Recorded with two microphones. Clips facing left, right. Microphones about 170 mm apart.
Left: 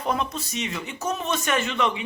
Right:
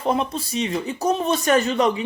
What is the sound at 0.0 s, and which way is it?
Speech, 30° right (ahead or behind).